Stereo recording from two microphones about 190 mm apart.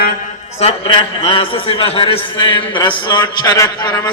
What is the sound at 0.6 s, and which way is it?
A man's voice, 30° left (ahead or behind).